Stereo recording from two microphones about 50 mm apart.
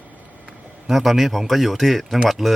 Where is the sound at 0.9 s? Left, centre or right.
Centre.